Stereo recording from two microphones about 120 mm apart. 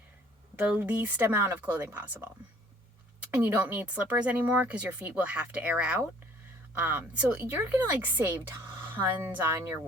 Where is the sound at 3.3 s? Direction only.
10° right (ahead or behind).